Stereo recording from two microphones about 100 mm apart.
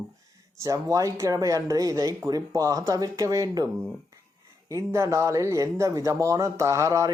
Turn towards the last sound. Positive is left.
turn(degrees=-30)  # may be behind; listen again after turning